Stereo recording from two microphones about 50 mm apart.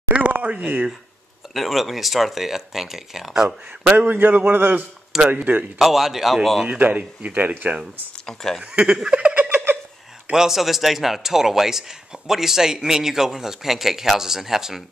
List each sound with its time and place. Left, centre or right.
0.1 s a sound: right
1.5 s speech: centre
3.9 s a man's voice: right
5.3 s speech: right
5.8 s speech: centre
6.7 s speech: right
8.3 s speech: centre
9.3 s giggle: right
10.3 s a man's voice: centre